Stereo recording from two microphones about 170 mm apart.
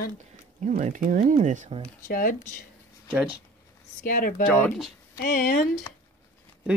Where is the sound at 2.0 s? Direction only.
55° left (ahead or behind).